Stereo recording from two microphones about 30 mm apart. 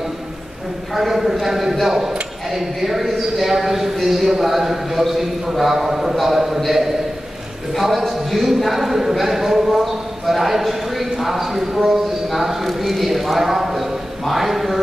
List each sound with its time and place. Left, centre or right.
0.9 s a man's voice: centre